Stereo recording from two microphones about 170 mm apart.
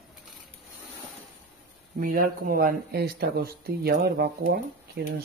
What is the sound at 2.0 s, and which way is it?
Speech, 55° right (ahead or behind).